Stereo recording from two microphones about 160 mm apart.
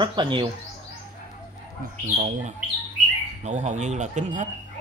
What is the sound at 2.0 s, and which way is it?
Speech, 50° right (ahead or behind).